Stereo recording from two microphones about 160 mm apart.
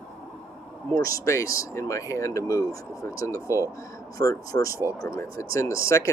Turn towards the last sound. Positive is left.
turn(degrees=20)  # may be behind; listen again after turning